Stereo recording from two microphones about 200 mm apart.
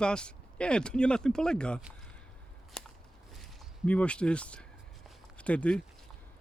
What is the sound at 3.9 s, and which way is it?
Speech, 5° left (ahead or behind).